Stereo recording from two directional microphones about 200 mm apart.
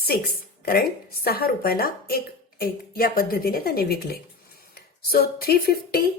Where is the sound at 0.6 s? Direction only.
50° left (ahead or behind).